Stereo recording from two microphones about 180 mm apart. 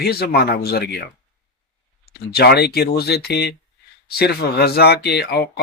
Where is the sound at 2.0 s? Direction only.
60° left (ahead or behind).